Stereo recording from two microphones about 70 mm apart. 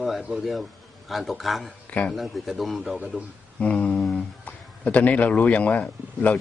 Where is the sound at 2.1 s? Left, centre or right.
Centre.